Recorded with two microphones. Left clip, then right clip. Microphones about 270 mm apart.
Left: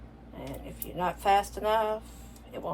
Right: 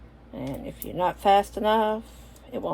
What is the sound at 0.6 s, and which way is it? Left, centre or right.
Speech, right.